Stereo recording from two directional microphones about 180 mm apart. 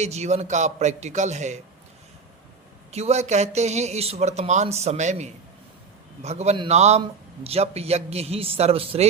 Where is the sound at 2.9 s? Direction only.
35° right (ahead or behind).